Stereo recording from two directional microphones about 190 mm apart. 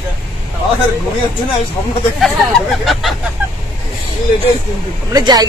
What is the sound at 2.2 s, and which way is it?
Speech, centre (ahead or behind).